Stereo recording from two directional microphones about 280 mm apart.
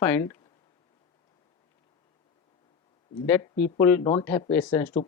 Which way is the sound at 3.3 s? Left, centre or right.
Centre.